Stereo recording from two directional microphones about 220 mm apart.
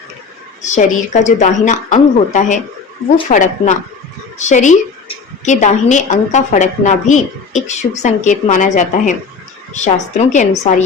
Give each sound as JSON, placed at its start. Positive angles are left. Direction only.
{"t": 0.6, "sound": "a woman's voice", "side_deg": 35}